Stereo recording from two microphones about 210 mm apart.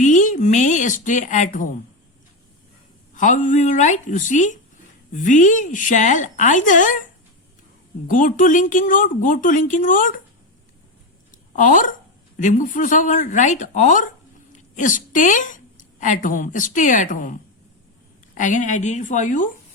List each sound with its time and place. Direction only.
0.0 s a woman's voice: 35° left (ahead or behind)
3.2 s speech: 35° left (ahead or behind)
8.0 s speech: 40° left (ahead or behind)
11.3 s a sound: 40° left (ahead or behind)
12.4 s a woman's voice: 35° left (ahead or behind)
18.3 s speech: 35° left (ahead or behind)